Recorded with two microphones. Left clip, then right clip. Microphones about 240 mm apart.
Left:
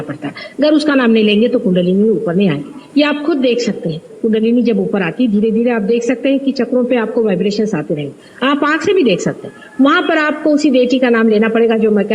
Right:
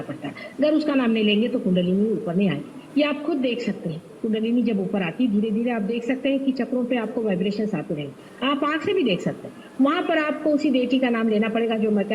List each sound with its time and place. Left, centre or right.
0.6 s a man's voice: left